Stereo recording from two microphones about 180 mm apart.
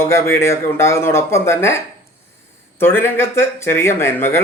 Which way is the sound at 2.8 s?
10° left (ahead or behind).